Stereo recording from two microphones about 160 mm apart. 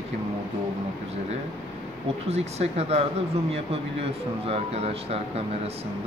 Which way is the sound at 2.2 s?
40° right (ahead or behind).